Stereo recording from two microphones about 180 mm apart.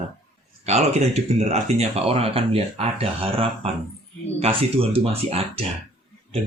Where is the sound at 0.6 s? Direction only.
35° right (ahead or behind).